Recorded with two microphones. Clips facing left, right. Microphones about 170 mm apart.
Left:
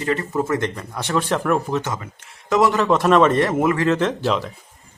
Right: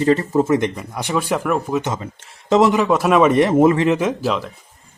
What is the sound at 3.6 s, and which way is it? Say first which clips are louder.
Speech: right 6 dB; 25° right (ahead or behind).